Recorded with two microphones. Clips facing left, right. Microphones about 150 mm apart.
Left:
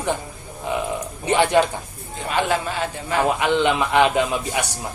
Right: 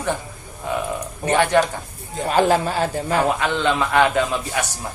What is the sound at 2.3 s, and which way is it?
Speech, 40° right (ahead or behind).